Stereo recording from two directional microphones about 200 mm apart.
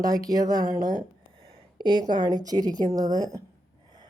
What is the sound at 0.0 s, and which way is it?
Speech, 20° right (ahead or behind).